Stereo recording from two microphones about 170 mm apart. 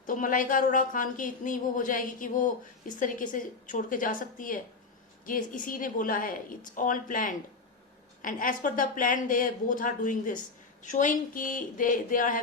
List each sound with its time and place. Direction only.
0.0 s a woman's voice: 50° left (ahead or behind)